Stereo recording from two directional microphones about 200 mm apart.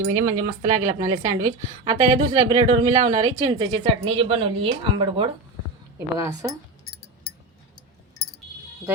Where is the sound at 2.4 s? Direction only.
20° right (ahead or behind).